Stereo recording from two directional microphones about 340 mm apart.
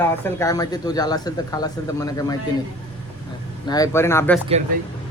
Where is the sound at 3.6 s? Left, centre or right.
Centre.